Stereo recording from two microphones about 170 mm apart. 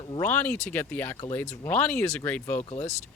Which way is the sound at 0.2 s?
10° left (ahead or behind).